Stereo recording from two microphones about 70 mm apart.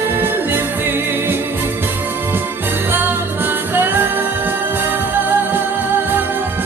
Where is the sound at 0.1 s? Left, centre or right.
Right.